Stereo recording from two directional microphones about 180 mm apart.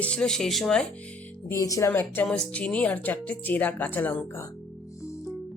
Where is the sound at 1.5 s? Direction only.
20° left (ahead or behind).